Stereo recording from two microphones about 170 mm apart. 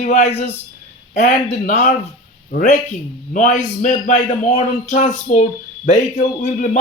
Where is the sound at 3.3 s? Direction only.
45° left (ahead or behind).